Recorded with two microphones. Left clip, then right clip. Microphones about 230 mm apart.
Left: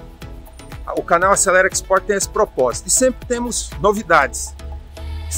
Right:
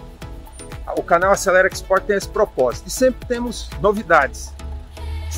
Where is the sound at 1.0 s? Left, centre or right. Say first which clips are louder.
Left 1 dB; centre.